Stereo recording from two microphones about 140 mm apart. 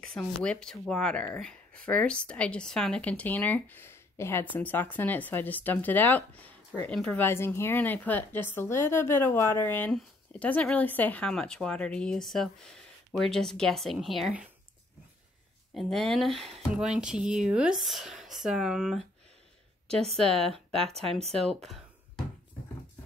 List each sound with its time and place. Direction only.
0.0 s speech: 5° left (ahead or behind)
15.7 s speech: centre (ahead or behind)
20.8 s speech: 45° right (ahead or behind)
21.6 s music: centre (ahead or behind)